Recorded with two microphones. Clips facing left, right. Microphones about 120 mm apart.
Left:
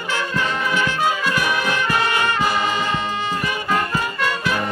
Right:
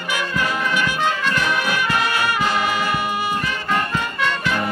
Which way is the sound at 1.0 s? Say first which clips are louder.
Left 1 dB; 10° left (ahead or behind).